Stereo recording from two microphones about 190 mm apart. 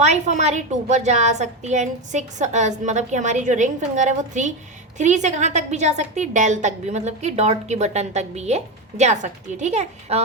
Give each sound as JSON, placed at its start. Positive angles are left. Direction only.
{"t": 0.0, "sound": "a woman's voice", "side_deg": -40}